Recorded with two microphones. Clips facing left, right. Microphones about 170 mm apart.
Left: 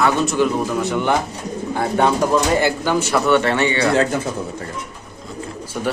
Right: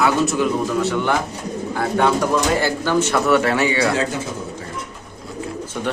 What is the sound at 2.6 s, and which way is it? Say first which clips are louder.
Speech: left 1 dB; 15° left (ahead or behind).